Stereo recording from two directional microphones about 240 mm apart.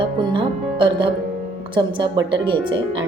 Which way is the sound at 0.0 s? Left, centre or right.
Centre.